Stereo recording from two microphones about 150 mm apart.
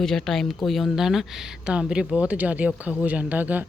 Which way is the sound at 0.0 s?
Centre (ahead or behind).